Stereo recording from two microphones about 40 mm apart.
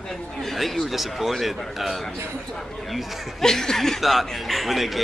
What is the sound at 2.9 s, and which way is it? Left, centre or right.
A woman's voice, centre.